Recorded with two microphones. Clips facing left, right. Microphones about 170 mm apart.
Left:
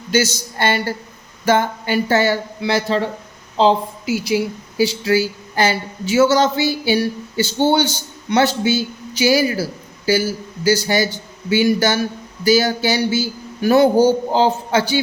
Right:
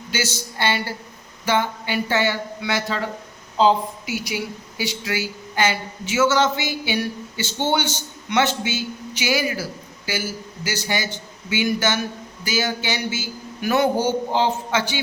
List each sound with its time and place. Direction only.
0.1 s speech: 40° left (ahead or behind)
4.1 s speech: 30° left (ahead or behind)
10.7 s speech: 35° left (ahead or behind)